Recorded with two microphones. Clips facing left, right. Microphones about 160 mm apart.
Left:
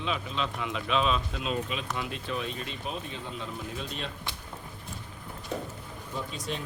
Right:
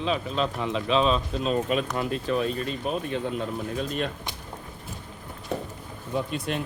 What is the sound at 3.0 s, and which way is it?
Speech, 55° right (ahead or behind).